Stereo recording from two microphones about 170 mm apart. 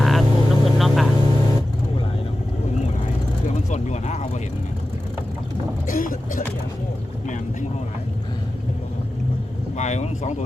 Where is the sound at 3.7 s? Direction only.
45° left (ahead or behind).